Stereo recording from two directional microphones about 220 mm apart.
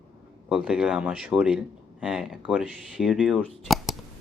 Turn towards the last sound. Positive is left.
turn(degrees=0)  # may be behind; listen again after turning